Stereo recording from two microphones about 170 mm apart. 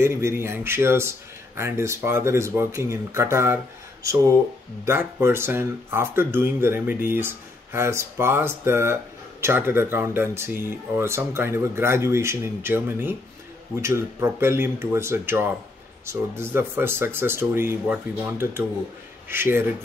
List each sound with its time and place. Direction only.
0.0 s speech: 15° right (ahead or behind)